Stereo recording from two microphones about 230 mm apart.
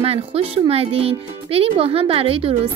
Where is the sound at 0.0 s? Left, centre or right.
Right.